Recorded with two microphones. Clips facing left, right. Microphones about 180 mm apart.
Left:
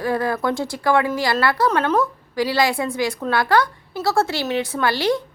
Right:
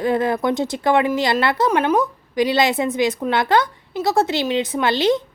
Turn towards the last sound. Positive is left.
turn(degrees=-20)  # may be behind; listen again after turning